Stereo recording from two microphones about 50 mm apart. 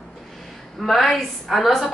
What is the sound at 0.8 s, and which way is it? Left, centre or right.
A woman's voice, centre.